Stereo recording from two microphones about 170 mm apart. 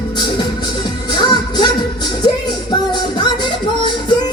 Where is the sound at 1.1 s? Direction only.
25° left (ahead or behind).